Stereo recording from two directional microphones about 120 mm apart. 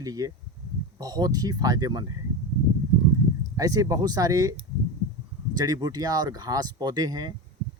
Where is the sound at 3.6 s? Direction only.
30° right (ahead or behind).